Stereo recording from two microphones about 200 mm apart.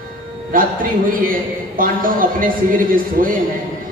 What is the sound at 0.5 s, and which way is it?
A man's voice, 45° right (ahead or behind).